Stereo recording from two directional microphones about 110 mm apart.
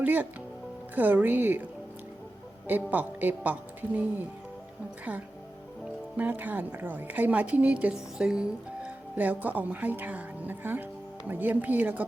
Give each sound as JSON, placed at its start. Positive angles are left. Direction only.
{"t": 0.0, "sound": "a woman's voice", "side_deg": -15}
{"t": 2.9, "sound": "a woman's voice", "side_deg": -15}
{"t": 6.1, "sound": "a woman's voice", "side_deg": -15}